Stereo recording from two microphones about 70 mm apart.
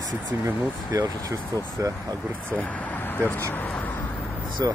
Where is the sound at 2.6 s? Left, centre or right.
Left.